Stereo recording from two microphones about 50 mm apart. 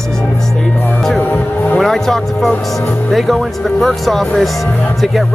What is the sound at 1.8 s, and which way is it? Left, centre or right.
Speech, centre.